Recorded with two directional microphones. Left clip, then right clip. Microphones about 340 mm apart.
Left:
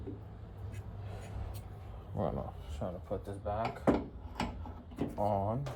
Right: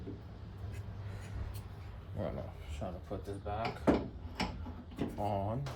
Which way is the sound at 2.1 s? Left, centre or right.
Centre.